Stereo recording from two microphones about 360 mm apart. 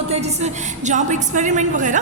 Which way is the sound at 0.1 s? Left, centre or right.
Centre.